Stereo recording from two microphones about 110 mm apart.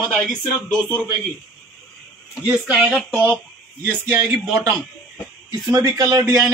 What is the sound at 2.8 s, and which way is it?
Speech, 5° left (ahead or behind).